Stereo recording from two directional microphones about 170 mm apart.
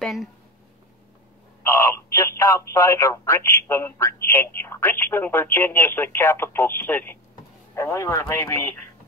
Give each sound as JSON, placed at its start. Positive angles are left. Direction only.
{"t": 0.0, "sound": "speech", "side_deg": 0}
{"t": 1.6, "sound": "speech", "side_deg": 15}